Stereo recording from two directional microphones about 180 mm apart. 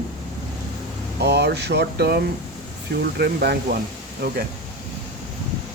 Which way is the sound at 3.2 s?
65° right (ahead or behind).